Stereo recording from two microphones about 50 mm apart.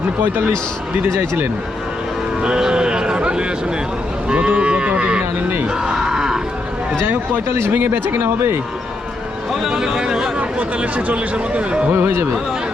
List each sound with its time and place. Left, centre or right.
0.2 s speech: right
1.0 s speech: right
2.4 s a sound: centre
4.3 s livestock: right
5.8 s cattle: centre
7.0 s speech: right
9.6 s speech: centre
10.3 s speech: right
11.9 s speech: right